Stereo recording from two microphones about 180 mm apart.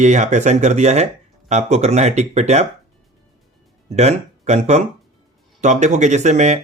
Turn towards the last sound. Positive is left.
turn(degrees=-40)  # may be behind; listen again after turning